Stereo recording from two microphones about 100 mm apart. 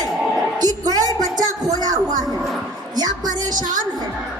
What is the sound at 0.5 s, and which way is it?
A woman's voice, 40° right (ahead or behind).